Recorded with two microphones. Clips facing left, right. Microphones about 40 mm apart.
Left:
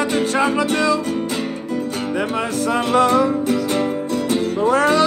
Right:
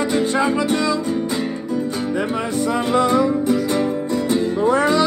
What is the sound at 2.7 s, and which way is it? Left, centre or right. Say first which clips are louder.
Music: left 2 dB; left.